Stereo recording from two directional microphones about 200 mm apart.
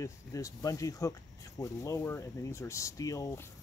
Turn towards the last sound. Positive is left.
turn(degrees=15)  # may be behind; listen again after turning